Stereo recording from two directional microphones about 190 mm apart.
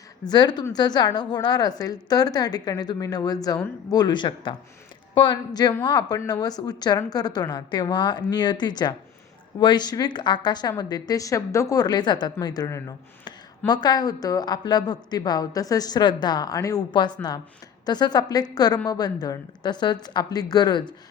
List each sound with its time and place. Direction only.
0.3 s speech: 20° left (ahead or behind)